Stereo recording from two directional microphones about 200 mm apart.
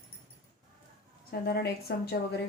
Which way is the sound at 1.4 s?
50° left (ahead or behind).